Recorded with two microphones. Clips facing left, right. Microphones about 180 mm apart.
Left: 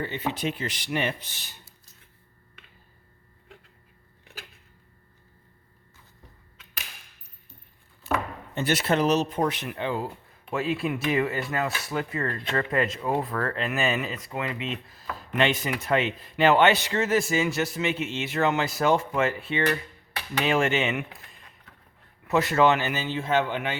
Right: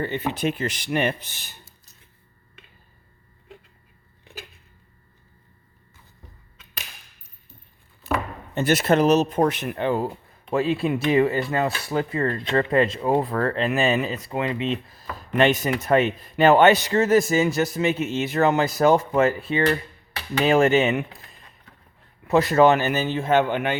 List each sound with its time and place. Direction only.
0.0 s speech: 55° right (ahead or behind)
8.5 s speech: 45° right (ahead or behind)
10.5 s a man's voice: 35° right (ahead or behind)
15.4 s a man's voice: 45° right (ahead or behind)
22.3 s speech: 35° right (ahead or behind); by 23.7 s 55° right (ahead or behind)